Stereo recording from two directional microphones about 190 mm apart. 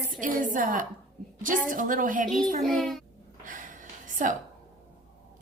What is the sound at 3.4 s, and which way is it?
Snort, 45° right (ahead or behind).